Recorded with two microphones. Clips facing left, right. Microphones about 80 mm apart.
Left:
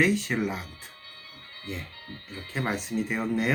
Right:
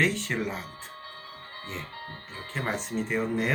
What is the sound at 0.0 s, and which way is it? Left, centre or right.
Speech, centre.